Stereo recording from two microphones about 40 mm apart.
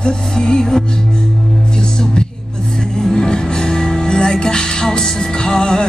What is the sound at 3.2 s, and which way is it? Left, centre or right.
Music, centre.